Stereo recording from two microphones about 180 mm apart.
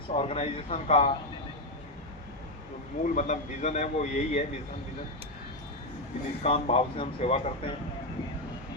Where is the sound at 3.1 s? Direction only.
40° left (ahead or behind).